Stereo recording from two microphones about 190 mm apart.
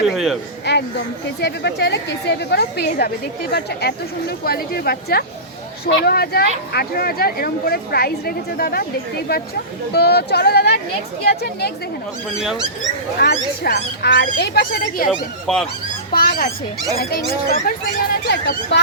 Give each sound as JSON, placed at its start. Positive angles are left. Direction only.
{"t": 0.0, "sound": "speech", "side_deg": 0}
{"t": 0.6, "sound": "a woman's voice", "side_deg": 60}
{"t": 9.9, "sound": "speech", "side_deg": 60}
{"t": 13.2, "sound": "speech", "side_deg": 60}
{"t": 15.1, "sound": "speech", "side_deg": 0}
{"t": 16.1, "sound": "a woman's voice", "side_deg": 50}